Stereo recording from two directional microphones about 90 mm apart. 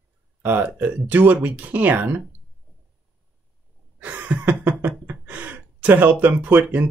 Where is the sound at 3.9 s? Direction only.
15° right (ahead or behind).